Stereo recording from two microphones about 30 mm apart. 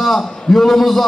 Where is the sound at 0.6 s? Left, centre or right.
Centre.